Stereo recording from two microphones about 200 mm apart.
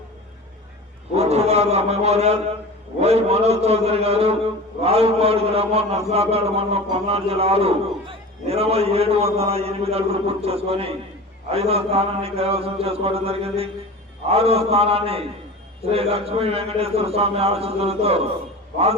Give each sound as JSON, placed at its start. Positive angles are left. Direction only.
{"t": 1.1, "sound": "a man's voice", "side_deg": -30}